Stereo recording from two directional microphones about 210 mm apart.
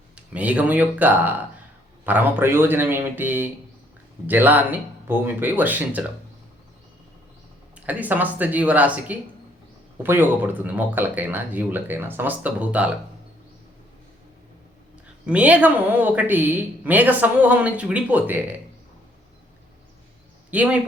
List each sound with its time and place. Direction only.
0.3 s speech: 5° right (ahead or behind)
7.8 s speech: 5° right (ahead or behind)
15.3 s speech: 5° right (ahead or behind)
20.5 s speech: 5° right (ahead or behind)